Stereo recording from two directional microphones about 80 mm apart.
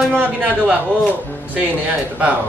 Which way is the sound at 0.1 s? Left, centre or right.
Right.